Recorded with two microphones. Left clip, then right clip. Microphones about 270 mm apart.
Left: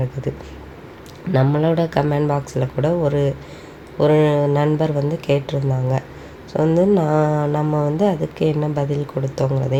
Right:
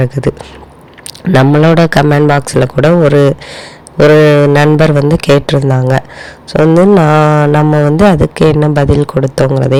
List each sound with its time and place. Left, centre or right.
1.3 s a man's voice: right